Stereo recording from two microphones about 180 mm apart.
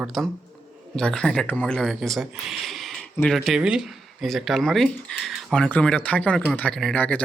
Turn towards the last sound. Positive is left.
turn(degrees=10)  # may be behind; listen again after turning